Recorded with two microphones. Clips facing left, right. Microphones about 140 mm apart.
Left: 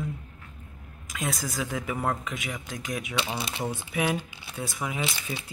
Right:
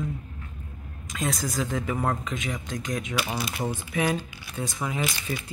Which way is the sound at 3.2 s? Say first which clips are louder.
Right 1 dB; 25° left (ahead or behind).